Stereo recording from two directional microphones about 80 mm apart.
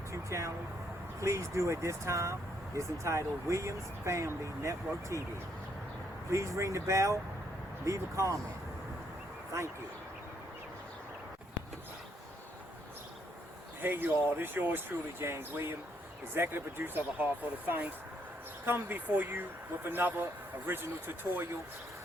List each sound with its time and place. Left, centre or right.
0.1 s speech: right
6.3 s speech: right
9.5 s speech: right
13.8 s speech: right